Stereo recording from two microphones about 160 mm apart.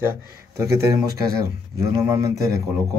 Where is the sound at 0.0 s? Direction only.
15° right (ahead or behind).